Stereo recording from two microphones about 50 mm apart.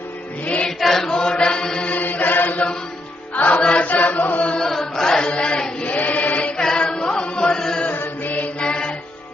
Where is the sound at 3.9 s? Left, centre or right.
Left.